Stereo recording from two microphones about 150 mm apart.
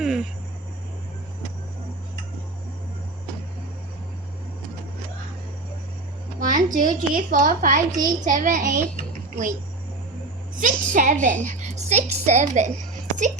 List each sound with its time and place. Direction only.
0.0 s a sound: centre (ahead or behind)
6.4 s a woman's voice: 60° right (ahead or behind)
10.6 s a child's voice: 60° right (ahead or behind)